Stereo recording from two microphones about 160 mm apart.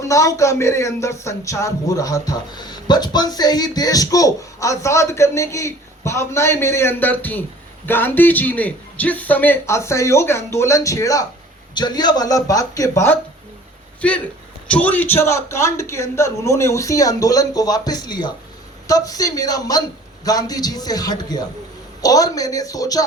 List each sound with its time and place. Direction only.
0.0 s a man's voice: 20° left (ahead or behind)
14.0 s a man's voice: 10° left (ahead or behind)